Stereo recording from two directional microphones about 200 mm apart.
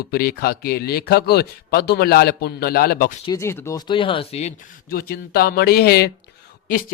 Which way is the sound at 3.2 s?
15° left (ahead or behind).